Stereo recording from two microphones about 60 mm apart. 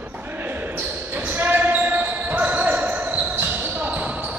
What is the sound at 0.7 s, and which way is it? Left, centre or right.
Basketball bounce, right.